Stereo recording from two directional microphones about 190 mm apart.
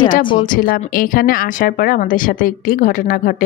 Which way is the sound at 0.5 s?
45° left (ahead or behind).